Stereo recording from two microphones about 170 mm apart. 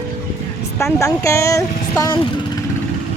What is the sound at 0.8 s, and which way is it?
Speech, 20° left (ahead or behind).